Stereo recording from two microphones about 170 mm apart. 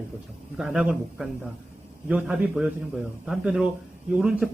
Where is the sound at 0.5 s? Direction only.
5° right (ahead or behind).